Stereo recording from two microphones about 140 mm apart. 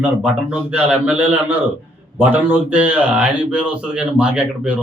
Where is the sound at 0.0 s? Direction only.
10° right (ahead or behind).